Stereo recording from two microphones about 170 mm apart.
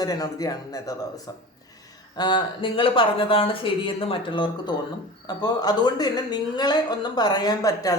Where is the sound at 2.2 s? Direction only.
25° left (ahead or behind).